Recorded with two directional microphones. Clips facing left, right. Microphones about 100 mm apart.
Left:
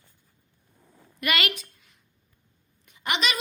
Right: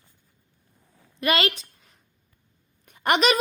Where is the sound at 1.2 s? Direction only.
30° right (ahead or behind).